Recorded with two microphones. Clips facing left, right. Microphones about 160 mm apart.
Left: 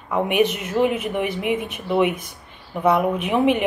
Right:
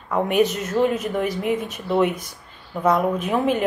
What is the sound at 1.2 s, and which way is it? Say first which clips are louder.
Speech: even; 60° left (ahead or behind).